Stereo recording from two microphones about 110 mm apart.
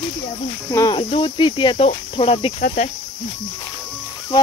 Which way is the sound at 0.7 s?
25° left (ahead or behind).